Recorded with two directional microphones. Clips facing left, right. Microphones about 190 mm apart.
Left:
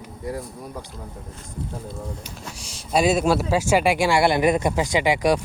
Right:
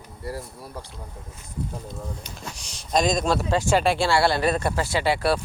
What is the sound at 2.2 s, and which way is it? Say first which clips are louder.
Speech: left 1 dB; 5° left (ahead or behind).